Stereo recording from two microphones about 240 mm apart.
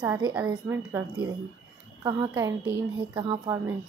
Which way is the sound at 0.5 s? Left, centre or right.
Centre.